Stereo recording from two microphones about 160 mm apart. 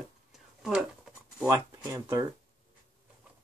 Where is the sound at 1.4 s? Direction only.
20° right (ahead or behind).